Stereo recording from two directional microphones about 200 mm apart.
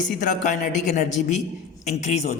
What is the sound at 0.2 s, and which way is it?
A man's voice, 40° left (ahead or behind).